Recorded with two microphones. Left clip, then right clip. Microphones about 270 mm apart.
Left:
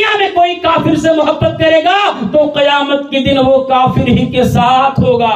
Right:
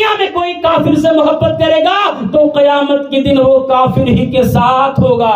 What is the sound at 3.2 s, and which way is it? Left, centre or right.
A man's voice, centre.